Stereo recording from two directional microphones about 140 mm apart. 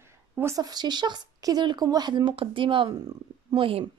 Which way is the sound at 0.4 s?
20° right (ahead or behind).